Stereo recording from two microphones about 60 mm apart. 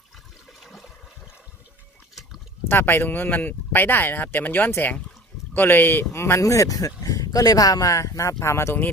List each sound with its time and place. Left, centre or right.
0.6 s toilet flush: centre
2.6 s speech: left
6.1 s speech: left
6.4 s speech: left